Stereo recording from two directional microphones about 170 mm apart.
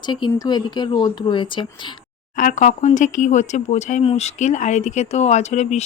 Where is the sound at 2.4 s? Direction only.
50° left (ahead or behind).